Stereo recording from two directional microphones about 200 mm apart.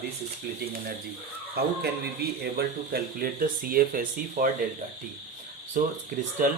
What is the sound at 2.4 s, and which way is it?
Speech, 50° right (ahead or behind).